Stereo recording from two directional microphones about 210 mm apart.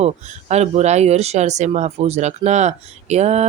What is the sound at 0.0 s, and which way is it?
Speech, 30° right (ahead or behind).